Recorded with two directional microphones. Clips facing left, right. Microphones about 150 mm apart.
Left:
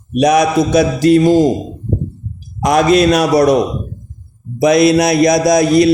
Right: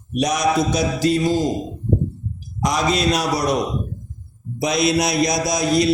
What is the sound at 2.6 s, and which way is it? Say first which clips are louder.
Mantra: left 9 dB; 60° left (ahead or behind).